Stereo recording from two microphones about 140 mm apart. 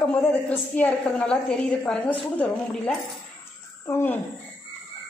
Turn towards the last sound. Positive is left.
turn(degrees=15)  # may be behind; listen again after turning